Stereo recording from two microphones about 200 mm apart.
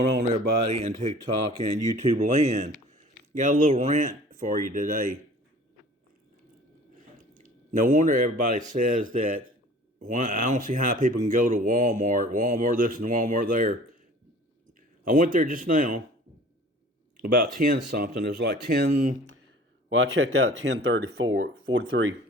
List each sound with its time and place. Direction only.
0.3 s speech: 30° right (ahead or behind)
7.3 s speech: 40° right (ahead or behind)
15.0 s speech: 40° right (ahead or behind)
17.2 s speech: 45° right (ahead or behind)
19.9 s speech: 75° right (ahead or behind)
20.6 s speech: 65° right (ahead or behind)